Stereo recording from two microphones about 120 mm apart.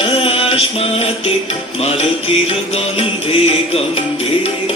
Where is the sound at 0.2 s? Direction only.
50° left (ahead or behind).